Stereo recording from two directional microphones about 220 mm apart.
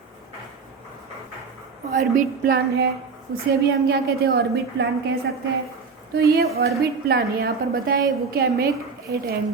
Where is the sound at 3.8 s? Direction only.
45° right (ahead or behind).